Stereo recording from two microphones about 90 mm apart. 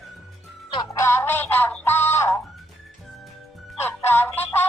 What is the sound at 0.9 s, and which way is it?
Music, 30° left (ahead or behind).